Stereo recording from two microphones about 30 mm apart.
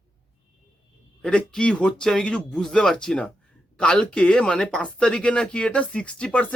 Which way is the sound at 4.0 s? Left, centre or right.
Left.